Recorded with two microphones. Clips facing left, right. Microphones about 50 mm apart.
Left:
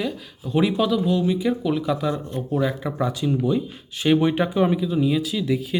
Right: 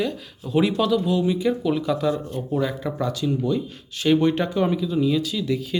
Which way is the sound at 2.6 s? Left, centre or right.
Centre.